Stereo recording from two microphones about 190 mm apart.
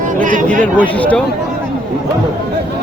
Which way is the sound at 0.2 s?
45° right (ahead or behind).